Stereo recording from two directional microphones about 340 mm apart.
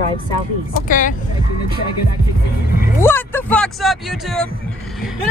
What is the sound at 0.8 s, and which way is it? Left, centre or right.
Speech, left.